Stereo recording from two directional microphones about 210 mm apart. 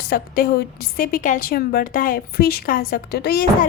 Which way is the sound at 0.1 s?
45° left (ahead or behind).